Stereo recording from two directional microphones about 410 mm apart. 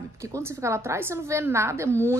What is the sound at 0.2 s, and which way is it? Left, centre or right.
A woman's voice, centre.